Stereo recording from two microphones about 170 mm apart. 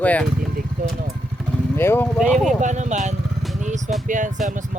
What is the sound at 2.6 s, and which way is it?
Speech, 45° right (ahead or behind).